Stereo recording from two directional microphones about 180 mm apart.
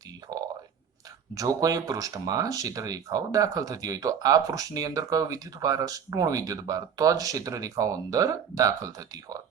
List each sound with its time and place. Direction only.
1.4 s speech: 20° right (ahead or behind)